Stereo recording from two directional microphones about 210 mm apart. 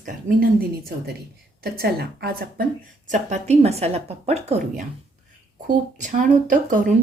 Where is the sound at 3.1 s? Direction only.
35° right (ahead or behind).